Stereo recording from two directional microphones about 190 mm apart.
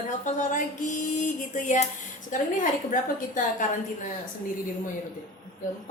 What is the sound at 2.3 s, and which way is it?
A woman's voice, 45° left (ahead or behind).